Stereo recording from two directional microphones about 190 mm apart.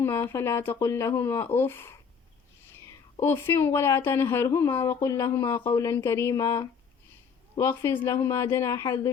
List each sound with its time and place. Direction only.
0.0 s a woman's voice: 10° left (ahead or behind)